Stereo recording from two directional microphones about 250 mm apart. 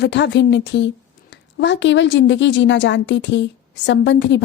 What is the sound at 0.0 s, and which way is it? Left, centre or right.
Speech, left.